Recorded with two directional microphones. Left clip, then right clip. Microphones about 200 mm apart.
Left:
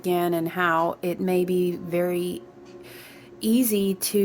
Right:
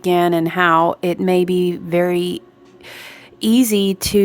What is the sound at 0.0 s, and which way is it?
Speech, 30° right (ahead or behind).